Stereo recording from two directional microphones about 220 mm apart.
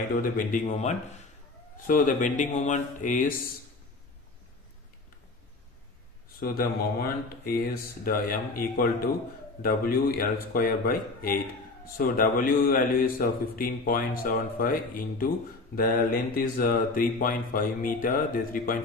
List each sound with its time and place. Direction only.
0.5 s a man's voice: 30° left (ahead or behind)
6.4 s a man's voice: 45° left (ahead or behind)